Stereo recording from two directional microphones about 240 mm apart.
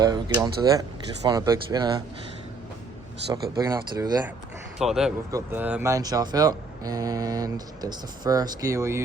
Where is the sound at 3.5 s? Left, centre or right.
Centre.